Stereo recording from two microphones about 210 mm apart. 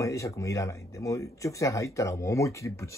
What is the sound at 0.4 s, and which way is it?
Speech, 15° left (ahead or behind).